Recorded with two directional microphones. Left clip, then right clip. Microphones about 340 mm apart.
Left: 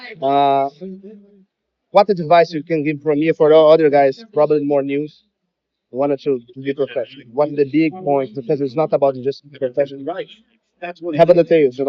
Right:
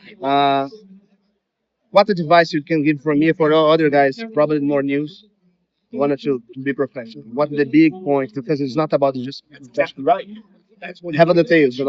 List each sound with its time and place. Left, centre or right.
0.2 s a man's voice: centre
1.9 s a man's voice: centre
9.5 s a man's voice: right
11.1 s a man's voice: centre